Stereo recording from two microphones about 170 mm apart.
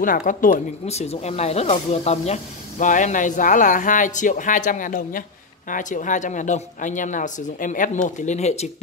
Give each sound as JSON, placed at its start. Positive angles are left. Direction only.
{"t": 0.0, "sound": "speech", "side_deg": 50}